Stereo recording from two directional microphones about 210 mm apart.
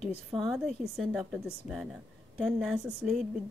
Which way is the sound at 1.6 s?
35° left (ahead or behind).